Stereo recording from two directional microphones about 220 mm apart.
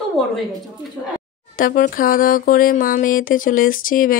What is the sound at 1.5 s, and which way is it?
Speech, 40° left (ahead or behind).